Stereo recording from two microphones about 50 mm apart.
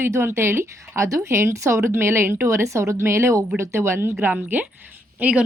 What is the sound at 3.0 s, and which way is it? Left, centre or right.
A woman's voice, right.